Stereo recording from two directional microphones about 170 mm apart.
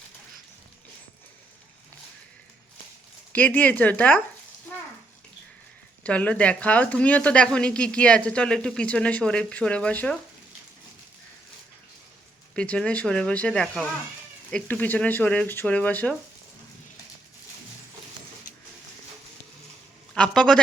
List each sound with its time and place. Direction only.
3.3 s speech: 10° left (ahead or behind)
6.0 s speech: 10° left (ahead or behind)
12.5 s speech: 5° left (ahead or behind)
20.1 s a man's voice: 5° left (ahead or behind)